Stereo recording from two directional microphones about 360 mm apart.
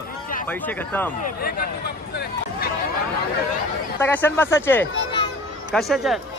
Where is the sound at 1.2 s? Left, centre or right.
Left.